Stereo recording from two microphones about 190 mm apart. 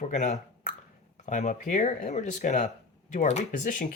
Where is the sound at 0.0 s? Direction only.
40° left (ahead or behind).